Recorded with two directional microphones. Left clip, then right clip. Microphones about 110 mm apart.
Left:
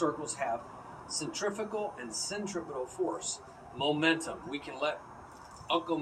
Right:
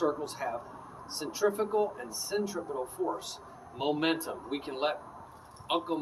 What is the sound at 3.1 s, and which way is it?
Speech, 35° right (ahead or behind).